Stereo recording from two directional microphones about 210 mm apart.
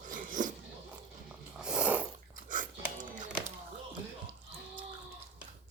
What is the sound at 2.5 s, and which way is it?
Dog, 40° right (ahead or behind).